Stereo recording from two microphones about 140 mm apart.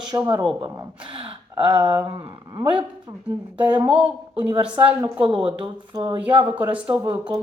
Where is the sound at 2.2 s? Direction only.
35° right (ahead or behind).